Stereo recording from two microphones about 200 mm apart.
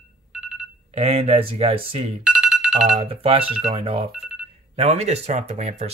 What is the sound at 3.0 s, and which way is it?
Speech, 30° right (ahead or behind).